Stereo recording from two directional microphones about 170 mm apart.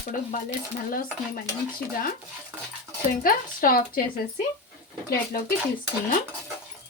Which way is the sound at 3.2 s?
55° left (ahead or behind).